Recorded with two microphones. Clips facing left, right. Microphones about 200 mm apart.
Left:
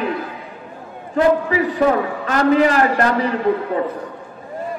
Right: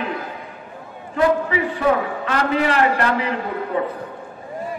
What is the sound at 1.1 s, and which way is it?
A man's voice, 40° left (ahead or behind).